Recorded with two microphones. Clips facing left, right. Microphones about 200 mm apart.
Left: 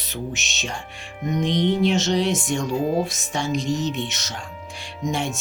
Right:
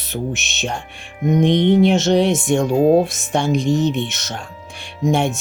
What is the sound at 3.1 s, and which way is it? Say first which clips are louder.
Speech: right 7 dB; 55° right (ahead or behind).